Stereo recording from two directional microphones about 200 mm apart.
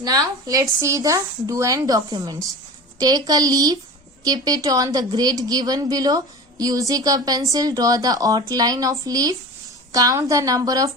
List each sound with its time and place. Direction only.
0.0 s a woman's voice: 20° right (ahead or behind)